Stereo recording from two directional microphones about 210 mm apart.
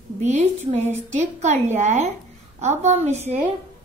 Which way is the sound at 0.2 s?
35° right (ahead or behind).